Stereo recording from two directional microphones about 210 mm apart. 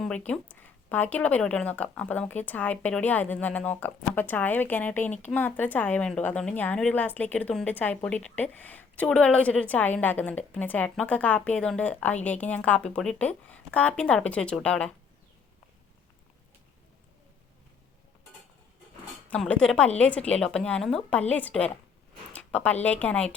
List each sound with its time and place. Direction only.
0.3 s a woman's voice: 5° left (ahead or behind)
19.3 s a woman's voice: 5° left (ahead or behind)